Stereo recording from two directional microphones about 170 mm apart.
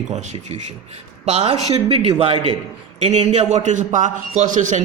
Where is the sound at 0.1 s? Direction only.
40° right (ahead or behind).